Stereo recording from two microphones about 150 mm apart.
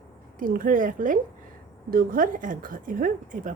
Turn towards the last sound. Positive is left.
turn(degrees=-65)  # may be behind; listen again after turning